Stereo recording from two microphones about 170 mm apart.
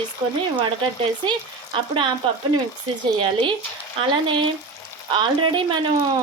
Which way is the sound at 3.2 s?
30° right (ahead or behind).